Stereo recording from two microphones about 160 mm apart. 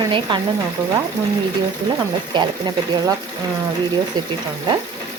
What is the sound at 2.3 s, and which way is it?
Speech, 25° right (ahead or behind).